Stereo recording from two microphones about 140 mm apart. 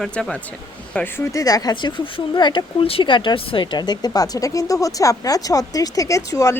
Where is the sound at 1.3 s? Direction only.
25° left (ahead or behind).